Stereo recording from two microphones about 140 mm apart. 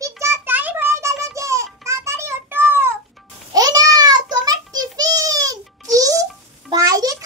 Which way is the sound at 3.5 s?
25° right (ahead or behind).